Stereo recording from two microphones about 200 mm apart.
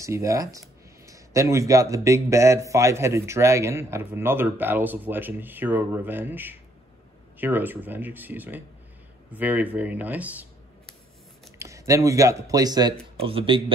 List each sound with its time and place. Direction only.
0.0 s a man's voice: 15° right (ahead or behind)
11.5 s a man's voice: 15° right (ahead or behind)